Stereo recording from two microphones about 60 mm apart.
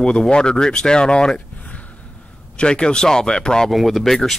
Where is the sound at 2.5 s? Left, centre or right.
Centre.